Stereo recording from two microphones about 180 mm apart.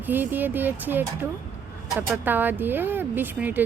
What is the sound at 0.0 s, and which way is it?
Speech, 10° right (ahead or behind).